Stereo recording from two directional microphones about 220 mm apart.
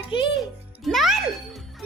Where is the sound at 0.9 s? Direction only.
Centre (ahead or behind).